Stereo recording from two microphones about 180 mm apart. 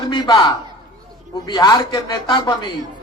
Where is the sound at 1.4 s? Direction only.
25° left (ahead or behind).